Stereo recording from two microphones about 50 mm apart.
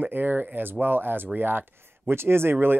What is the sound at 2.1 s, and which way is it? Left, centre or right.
Speech, right.